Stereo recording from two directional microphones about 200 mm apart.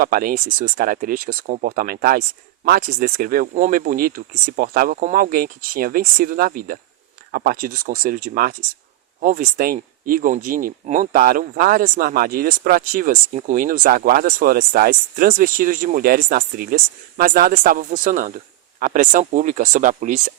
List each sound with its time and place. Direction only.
0.0 s speech: 45° right (ahead or behind)